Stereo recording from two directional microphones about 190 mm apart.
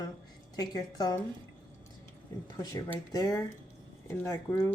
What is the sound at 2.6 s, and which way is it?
Speech, 15° left (ahead or behind).